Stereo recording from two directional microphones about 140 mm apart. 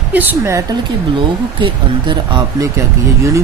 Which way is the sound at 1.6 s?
35° right (ahead or behind).